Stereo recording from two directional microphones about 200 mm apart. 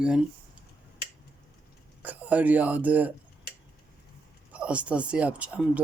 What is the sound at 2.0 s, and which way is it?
Speech, 10° right (ahead or behind).